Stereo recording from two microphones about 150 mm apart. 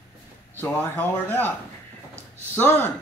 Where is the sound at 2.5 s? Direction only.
15° left (ahead or behind).